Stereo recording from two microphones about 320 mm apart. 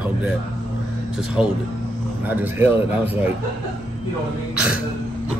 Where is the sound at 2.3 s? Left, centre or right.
Centre.